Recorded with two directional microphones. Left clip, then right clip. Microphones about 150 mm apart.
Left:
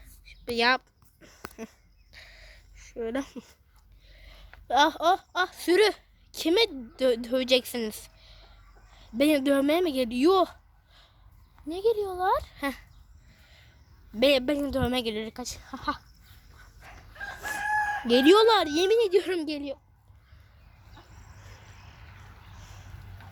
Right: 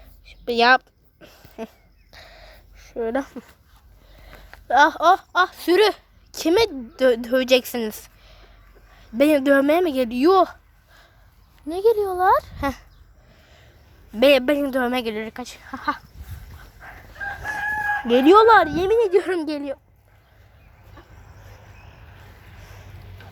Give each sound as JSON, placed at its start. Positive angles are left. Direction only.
{"t": 0.0, "sound": "a sound", "side_deg": 0}
{"t": 3.2, "sound": "speech", "side_deg": 20}
{"t": 4.2, "sound": "a sound", "side_deg": 20}
{"t": 4.7, "sound": "a woman's voice", "side_deg": 5}
{"t": 11.7, "sound": "a child's voice", "side_deg": -35}
{"t": 12.3, "sound": "speech", "side_deg": -10}
{"t": 13.4, "sound": "a sound", "side_deg": 0}
{"t": 14.2, "sound": "speech", "side_deg": -15}
{"t": 14.8, "sound": "speech", "side_deg": 5}
{"t": 17.4, "sound": "chicken", "side_deg": 5}
{"t": 18.2, "sound": "speech", "side_deg": 15}
{"t": 18.7, "sound": "speech", "side_deg": 30}
{"t": 18.9, "sound": "speech", "side_deg": 5}
{"t": 22.6, "sound": "boat", "side_deg": 0}